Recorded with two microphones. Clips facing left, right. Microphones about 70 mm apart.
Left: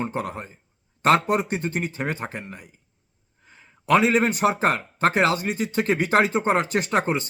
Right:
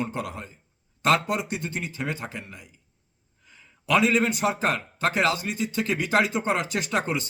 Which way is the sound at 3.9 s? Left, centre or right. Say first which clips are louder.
Left 3 dB; left.